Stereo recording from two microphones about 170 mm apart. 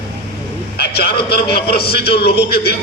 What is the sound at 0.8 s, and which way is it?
A man's voice, 65° left (ahead or behind).